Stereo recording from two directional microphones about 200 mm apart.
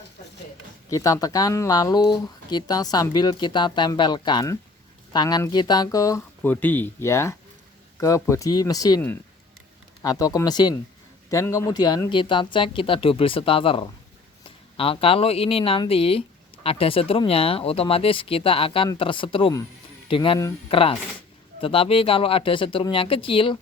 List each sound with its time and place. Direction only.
0.9 s speech: 15° left (ahead or behind)